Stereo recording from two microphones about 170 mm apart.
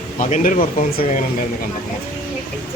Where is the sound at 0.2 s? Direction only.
45° left (ahead or behind).